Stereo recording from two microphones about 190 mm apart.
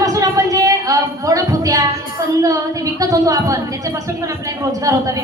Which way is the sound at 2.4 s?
15° right (ahead or behind).